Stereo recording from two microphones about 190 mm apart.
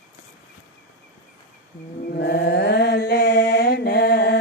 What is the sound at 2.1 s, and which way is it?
Mantra, 60° left (ahead or behind).